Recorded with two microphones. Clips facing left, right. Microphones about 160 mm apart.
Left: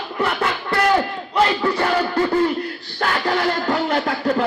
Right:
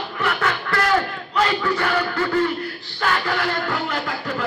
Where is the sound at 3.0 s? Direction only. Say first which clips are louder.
Even; 45° left (ahead or behind).